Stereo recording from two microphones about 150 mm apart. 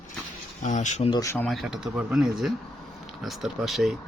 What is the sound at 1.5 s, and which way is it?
Speech, centre (ahead or behind).